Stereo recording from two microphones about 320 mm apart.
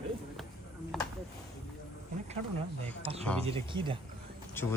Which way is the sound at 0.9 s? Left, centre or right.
Centre.